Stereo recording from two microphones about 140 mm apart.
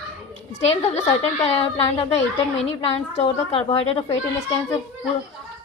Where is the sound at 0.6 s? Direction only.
50° left (ahead or behind).